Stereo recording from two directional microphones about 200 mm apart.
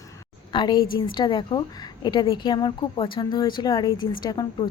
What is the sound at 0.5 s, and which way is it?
A woman's voice, 20° left (ahead or behind).